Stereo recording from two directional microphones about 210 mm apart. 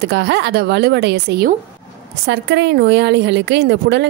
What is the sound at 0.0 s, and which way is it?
A woman's voice, 55° right (ahead or behind).